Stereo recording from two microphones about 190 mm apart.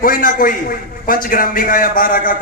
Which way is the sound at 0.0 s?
45° left (ahead or behind).